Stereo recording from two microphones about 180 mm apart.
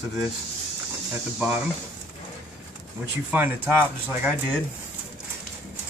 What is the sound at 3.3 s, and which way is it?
Speech, 10° right (ahead or behind).